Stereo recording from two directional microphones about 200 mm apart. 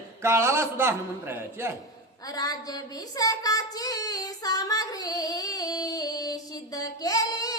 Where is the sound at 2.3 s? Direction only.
20° left (ahead or behind).